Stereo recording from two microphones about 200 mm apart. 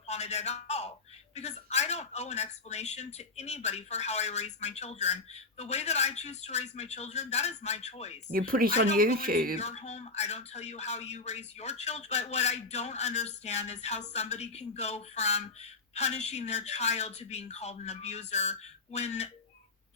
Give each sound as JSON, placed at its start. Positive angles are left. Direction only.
{"t": 0.1, "sound": "a man's voice", "side_deg": 35}
{"t": 8.3, "sound": "speech", "side_deg": -45}
{"t": 9.6, "sound": "a man's voice", "side_deg": 35}